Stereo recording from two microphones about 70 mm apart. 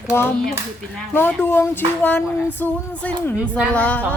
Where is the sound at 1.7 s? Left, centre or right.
Left.